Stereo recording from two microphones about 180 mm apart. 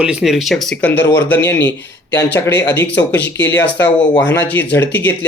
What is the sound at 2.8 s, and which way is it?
Speech, 10° left (ahead or behind).